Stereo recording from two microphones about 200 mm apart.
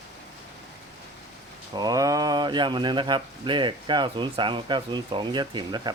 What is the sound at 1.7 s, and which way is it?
Speech, 20° right (ahead or behind).